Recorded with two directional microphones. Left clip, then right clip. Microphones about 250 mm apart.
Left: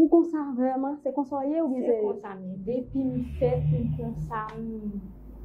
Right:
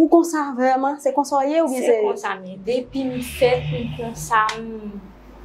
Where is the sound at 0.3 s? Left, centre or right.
Centre.